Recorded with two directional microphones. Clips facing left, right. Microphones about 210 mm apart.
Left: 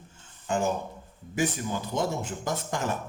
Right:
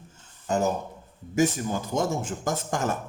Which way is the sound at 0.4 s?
40° right (ahead or behind).